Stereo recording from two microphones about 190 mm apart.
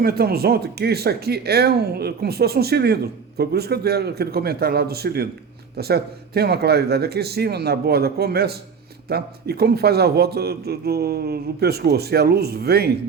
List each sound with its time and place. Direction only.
0.0 s speech: 55° right (ahead or behind)